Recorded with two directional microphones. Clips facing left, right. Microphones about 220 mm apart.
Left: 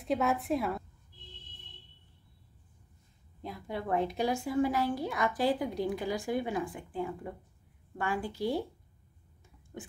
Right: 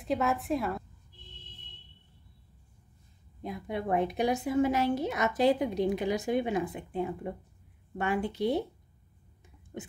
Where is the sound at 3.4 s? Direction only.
20° right (ahead or behind).